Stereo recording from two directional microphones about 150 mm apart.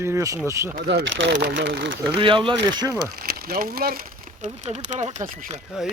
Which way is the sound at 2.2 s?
35° right (ahead or behind).